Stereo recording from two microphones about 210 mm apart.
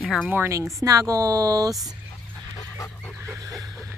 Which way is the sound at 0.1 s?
5° right (ahead or behind).